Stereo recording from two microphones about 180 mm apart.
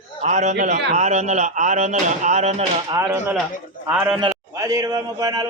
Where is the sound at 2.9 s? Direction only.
15° right (ahead or behind).